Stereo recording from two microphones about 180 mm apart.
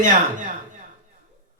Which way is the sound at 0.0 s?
45° right (ahead or behind).